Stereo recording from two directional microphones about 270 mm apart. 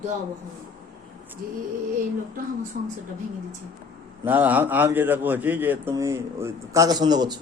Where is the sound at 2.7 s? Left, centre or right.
Right.